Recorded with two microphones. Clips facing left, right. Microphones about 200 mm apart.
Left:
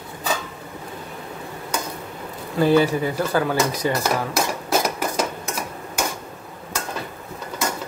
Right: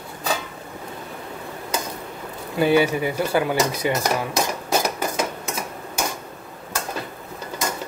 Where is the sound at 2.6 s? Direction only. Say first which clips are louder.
Left 1 dB; 10° right (ahead or behind).